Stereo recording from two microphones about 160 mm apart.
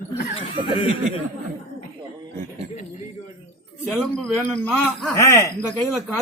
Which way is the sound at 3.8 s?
Centre (ahead or behind).